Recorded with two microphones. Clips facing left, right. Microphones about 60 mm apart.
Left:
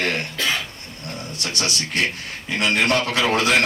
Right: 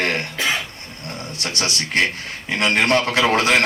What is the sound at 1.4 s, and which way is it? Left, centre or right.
A man's voice, right.